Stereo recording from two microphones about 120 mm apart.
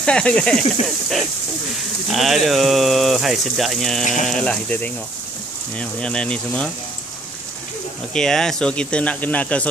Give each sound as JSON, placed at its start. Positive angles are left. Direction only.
{"t": 0.0, "sound": "speech", "side_deg": 10}
{"t": 8.1, "sound": "speech", "side_deg": 5}